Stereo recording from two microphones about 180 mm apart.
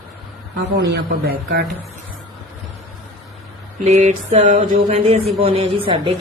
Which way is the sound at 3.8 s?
40° right (ahead or behind).